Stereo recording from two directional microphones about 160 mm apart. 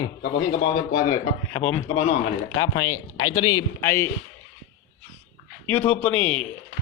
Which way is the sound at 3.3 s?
20° left (ahead or behind).